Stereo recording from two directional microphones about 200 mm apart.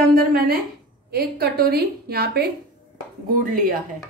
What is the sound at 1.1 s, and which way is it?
A woman's voice, 50° right (ahead or behind).